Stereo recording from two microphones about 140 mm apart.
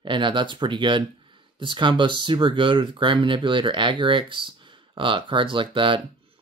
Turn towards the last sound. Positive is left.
turn(degrees=-35)  # may be behind; listen again after turning